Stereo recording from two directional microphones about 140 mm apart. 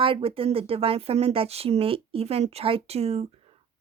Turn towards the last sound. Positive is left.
turn(degrees=-45)  # may be behind; listen again after turning